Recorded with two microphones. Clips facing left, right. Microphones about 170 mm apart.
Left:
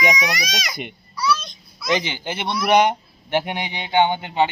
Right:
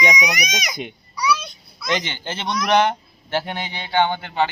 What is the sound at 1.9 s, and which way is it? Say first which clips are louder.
Speech: left 2 dB; 15° left (ahead or behind).